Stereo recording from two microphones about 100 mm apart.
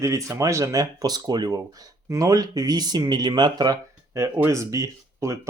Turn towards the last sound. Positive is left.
turn(degrees=-30)  # may be behind; listen again after turning